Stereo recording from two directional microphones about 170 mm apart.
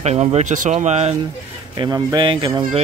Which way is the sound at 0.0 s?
40° right (ahead or behind).